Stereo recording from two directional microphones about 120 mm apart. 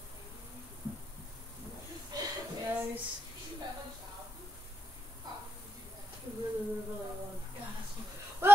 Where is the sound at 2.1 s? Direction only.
35° right (ahead or behind).